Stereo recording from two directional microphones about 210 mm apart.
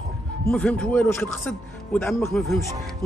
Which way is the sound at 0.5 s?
5° left (ahead or behind).